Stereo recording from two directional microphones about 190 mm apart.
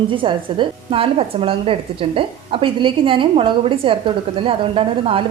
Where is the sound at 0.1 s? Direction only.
25° right (ahead or behind).